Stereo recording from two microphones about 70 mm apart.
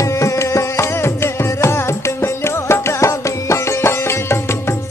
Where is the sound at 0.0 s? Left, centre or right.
Left.